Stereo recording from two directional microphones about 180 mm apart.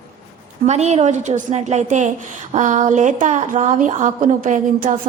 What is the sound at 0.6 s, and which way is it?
A woman's voice, 40° right (ahead or behind).